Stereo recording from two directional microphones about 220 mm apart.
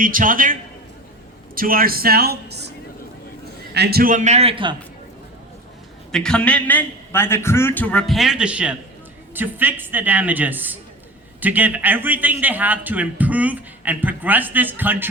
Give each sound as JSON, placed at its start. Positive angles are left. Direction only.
{"t": 0.0, "sound": "a man's voice", "side_deg": -40}
{"t": 1.5, "sound": "speech", "side_deg": -40}
{"t": 3.8, "sound": "a man's voice", "side_deg": -45}
{"t": 6.1, "sound": "a man's voice", "side_deg": 5}